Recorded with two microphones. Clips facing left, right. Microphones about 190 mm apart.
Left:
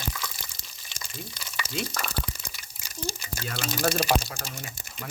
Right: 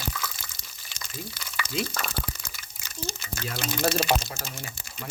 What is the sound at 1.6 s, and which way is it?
Speech, 10° left (ahead or behind).